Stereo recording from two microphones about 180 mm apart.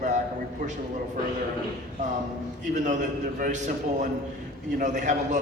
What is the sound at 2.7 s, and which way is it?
Speech, 45° right (ahead or behind).